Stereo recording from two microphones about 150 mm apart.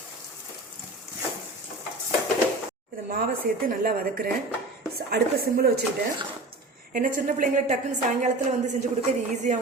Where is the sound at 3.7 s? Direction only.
80° right.